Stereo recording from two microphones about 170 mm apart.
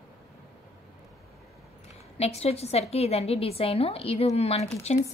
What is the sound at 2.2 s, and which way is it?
A woman's voice, 35° left (ahead or behind).